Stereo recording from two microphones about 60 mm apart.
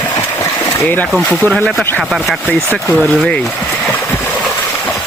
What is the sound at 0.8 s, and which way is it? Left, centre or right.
Speech, left.